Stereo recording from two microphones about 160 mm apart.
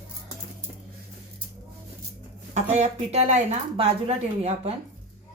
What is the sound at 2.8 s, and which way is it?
A woman's voice, 45° right (ahead or behind).